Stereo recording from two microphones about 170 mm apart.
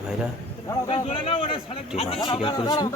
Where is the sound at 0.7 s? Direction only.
30° left (ahead or behind).